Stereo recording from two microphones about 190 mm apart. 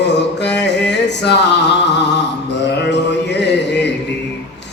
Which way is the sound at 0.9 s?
65° left (ahead or behind).